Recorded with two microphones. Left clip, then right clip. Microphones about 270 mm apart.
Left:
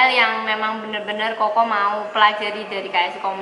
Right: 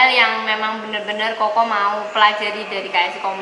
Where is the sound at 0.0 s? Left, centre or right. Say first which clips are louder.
Right 2 dB; centre.